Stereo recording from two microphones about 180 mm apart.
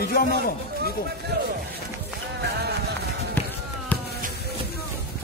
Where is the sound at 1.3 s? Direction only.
60° right (ahead or behind).